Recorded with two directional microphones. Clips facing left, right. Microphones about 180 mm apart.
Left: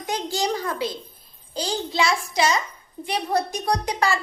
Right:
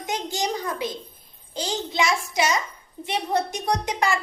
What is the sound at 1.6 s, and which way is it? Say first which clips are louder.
Speech: left 1 dB; 20° right (ahead or behind).